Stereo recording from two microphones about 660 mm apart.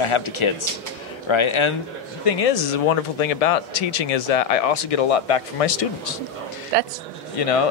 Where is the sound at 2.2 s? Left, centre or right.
Left.